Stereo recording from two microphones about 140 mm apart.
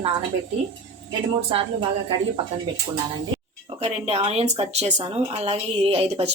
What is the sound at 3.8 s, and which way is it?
A woman's voice, 50° right (ahead or behind).